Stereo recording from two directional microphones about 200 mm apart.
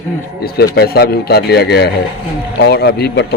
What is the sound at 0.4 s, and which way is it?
A man's voice, 55° left (ahead or behind).